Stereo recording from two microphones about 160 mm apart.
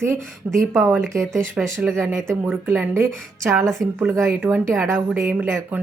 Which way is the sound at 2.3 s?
15° right (ahead or behind).